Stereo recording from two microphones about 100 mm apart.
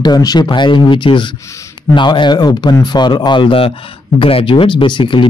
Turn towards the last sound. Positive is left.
turn(degrees=55)  # may be behind; listen again after turning